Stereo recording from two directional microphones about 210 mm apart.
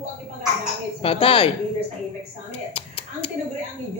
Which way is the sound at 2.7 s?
25° left (ahead or behind).